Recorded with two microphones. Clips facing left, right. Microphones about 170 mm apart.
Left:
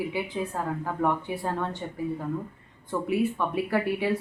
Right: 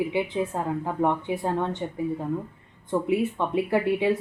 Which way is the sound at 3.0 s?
20° right (ahead or behind).